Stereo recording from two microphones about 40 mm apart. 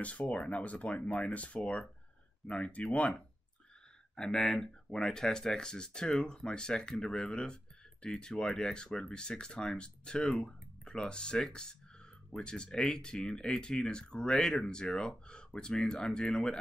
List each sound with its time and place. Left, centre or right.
0.0 s speech: left
4.3 s speech: centre